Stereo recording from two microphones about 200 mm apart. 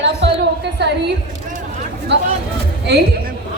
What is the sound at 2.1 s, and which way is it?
Speech, 60° right (ahead or behind).